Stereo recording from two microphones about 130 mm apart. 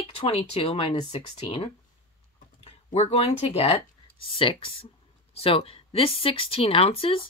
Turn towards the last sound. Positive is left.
turn(degrees=45)  # may be behind; listen again after turning